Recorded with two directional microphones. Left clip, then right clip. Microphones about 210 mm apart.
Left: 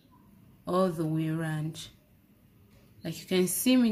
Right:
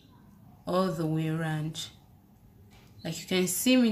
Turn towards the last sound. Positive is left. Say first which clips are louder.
# right 1 dB
turn(degrees=20)  # may be behind; listen again after turning